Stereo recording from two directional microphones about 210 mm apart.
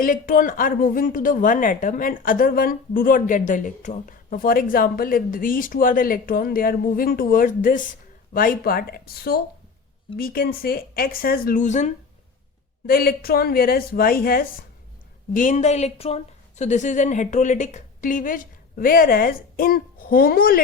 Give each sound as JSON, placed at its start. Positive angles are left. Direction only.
{"t": 0.0, "sound": "speech", "side_deg": 40}
{"t": 12.9, "sound": "speech", "side_deg": 45}